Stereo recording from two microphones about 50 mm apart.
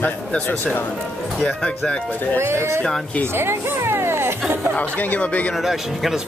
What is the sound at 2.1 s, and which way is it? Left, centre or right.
Speech, left.